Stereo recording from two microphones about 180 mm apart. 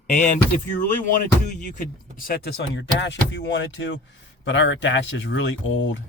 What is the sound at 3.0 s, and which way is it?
Speech, 80° left.